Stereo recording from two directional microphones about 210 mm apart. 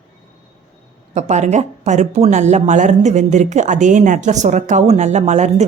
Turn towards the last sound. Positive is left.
turn(degrees=-35)  # may be behind; listen again after turning